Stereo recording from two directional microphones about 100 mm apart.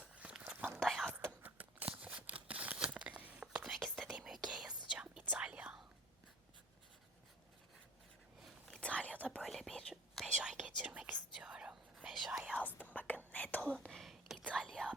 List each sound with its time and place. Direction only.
0.2 s whispering: 10° right (ahead or behind)
0.8 s whispering: centre (ahead or behind)
1.1 s a sound: 20° right (ahead or behind); by 4.1 s 5° left (ahead or behind)
4.1 s whispering: 5° right (ahead or behind)
8.4 s whispering: 5° left (ahead or behind)
9.4 s whispering: centre (ahead or behind)
12.5 s whispering: 15° left (ahead or behind)